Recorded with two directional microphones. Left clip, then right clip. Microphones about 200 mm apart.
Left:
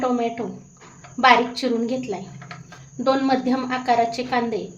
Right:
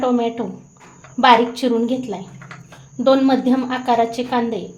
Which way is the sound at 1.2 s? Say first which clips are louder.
Right 3 dB; 30° right (ahead or behind).